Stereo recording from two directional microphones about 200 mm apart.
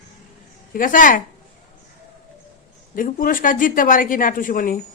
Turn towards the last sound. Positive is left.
turn(degrees=45)  # may be behind; listen again after turning